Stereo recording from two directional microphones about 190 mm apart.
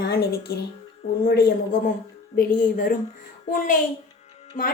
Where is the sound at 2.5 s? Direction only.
45° left (ahead or behind).